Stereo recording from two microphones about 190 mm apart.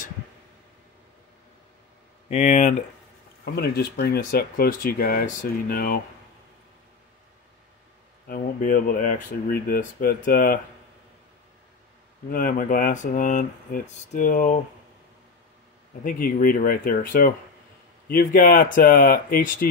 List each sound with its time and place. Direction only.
2.2 s speech: 40° left (ahead or behind)
3.5 s speech: 55° left (ahead or behind)
8.3 s speech: 50° left (ahead or behind)
12.3 s speech: 45° left (ahead or behind)
16.0 s speech: 45° left (ahead or behind)